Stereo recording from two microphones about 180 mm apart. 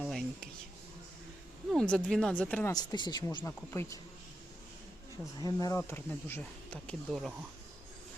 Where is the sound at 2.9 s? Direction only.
25° left (ahead or behind).